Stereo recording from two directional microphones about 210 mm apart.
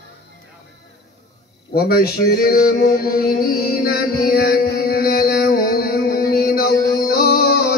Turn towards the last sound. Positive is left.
turn(degrees=45)  # may be behind; listen again after turning